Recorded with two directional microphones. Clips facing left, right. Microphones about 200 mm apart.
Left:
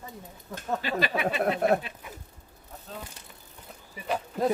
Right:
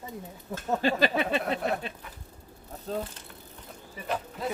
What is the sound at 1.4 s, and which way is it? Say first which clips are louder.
Speech: left 5 dB; 50° left (ahead or behind).